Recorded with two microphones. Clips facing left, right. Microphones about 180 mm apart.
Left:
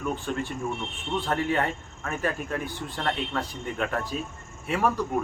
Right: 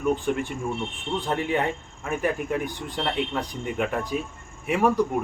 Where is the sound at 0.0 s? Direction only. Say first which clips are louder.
Right 5 dB; 15° right (ahead or behind).